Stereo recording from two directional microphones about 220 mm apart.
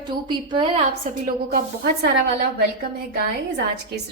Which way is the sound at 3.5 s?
50° right (ahead or behind).